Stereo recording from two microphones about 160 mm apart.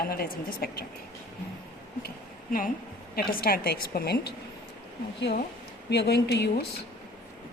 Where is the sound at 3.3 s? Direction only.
65° left (ahead or behind); by 6.6 s 90° left.